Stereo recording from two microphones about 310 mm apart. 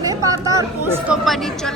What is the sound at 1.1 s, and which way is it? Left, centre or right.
Speech, centre.